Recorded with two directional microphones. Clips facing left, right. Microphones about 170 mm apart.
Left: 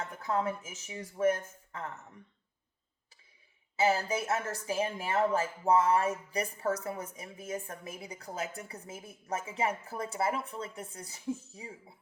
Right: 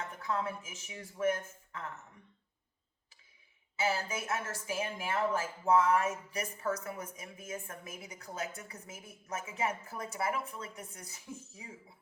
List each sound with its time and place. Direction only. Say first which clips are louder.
0.3 s a woman's voice: left 4 dB; 35° left (ahead or behind)
3.8 s a woman's voice: left 5 dB; 35° left (ahead or behind)